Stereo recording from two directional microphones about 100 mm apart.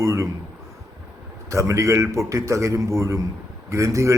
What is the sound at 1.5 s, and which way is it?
A man's voice, 30° right (ahead or behind).